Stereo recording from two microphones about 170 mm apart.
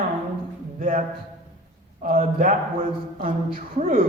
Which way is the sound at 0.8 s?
50° right (ahead or behind).